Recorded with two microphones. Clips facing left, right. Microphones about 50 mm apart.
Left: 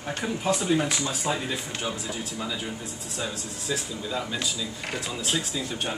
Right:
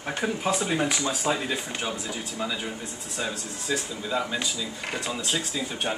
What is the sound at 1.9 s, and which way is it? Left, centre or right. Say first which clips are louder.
Speech: even; centre.